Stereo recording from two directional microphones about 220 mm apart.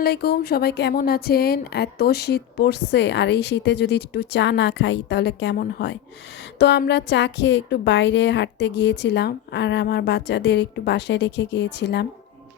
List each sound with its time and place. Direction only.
0.0 s speech: 45° left (ahead or behind)